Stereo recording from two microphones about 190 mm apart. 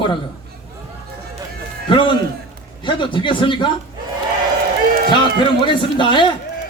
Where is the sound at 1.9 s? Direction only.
25° left (ahead or behind).